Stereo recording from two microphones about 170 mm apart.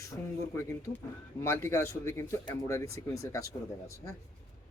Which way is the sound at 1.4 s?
15° left (ahead or behind).